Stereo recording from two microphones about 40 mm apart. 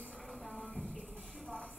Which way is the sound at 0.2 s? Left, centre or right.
Centre.